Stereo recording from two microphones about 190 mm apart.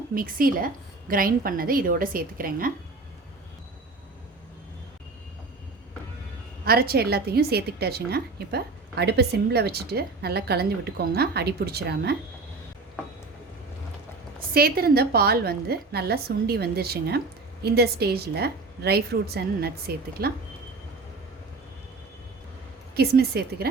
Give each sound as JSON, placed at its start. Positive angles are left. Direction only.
{"t": 0.1, "sound": "a woman's voice", "side_deg": -50}
{"t": 6.7, "sound": "a woman's voice", "side_deg": -55}
{"t": 14.5, "sound": "a woman's voice", "side_deg": -55}
{"t": 23.0, "sound": "a woman's voice", "side_deg": -60}